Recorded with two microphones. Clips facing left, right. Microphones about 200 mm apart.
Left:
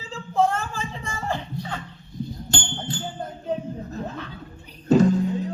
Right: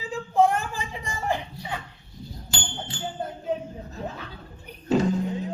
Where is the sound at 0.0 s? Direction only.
15° right (ahead or behind).